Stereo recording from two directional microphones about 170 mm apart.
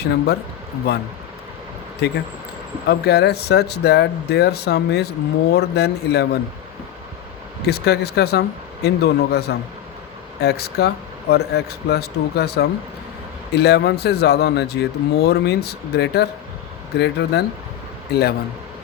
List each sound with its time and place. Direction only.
0.9 s speech: 70° left (ahead or behind)
7.7 s speech: 70° left (ahead or behind)